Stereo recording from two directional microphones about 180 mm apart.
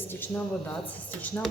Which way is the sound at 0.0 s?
10° left (ahead or behind).